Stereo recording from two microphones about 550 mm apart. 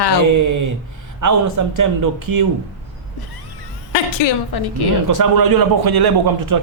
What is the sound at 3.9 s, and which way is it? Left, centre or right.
Speech, left.